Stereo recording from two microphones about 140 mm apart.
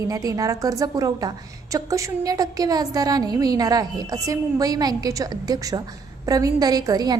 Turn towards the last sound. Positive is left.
turn(degrees=-30)  # may be behind; listen again after turning